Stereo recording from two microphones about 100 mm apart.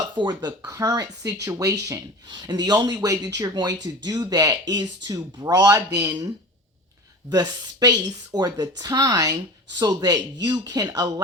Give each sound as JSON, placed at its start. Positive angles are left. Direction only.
{"t": 0.2, "sound": "speech", "side_deg": -45}
{"t": 2.3, "sound": "speech", "side_deg": -45}